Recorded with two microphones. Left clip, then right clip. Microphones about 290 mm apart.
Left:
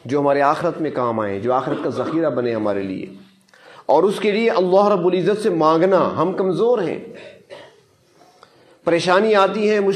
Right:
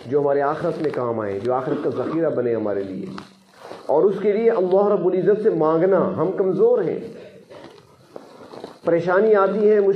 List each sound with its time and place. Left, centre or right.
0.1 s a man's voice: left
3.8 s a man's voice: left
8.8 s a man's voice: left